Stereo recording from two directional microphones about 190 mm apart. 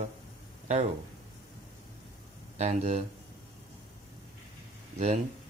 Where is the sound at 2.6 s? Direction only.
35° right (ahead or behind).